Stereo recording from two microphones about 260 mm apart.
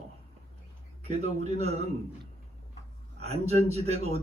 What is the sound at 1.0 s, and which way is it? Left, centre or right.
Speech, right.